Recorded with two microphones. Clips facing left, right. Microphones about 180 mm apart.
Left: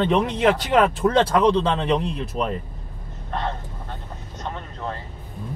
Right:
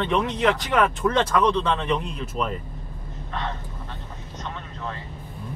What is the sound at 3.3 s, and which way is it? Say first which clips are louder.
Vehicle: left 4 dB; 50° left (ahead or behind).